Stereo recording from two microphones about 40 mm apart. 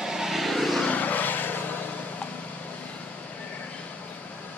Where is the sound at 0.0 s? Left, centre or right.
Centre.